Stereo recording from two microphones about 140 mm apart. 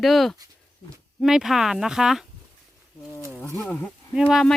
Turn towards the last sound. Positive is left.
turn(degrees=0)  # may be behind; listen again after turning